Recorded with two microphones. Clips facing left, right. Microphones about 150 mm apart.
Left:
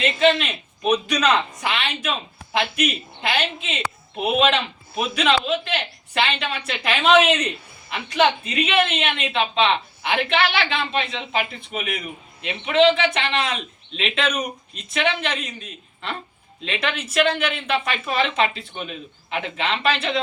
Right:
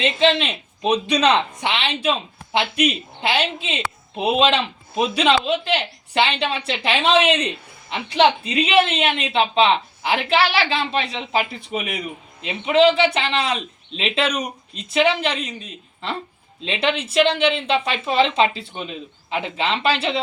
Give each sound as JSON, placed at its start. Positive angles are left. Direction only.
{"t": 0.0, "sound": "a woman's voice", "side_deg": -25}
{"t": 12.5, "sound": "a woman's voice", "side_deg": -35}
{"t": 16.6, "sound": "speech", "side_deg": -25}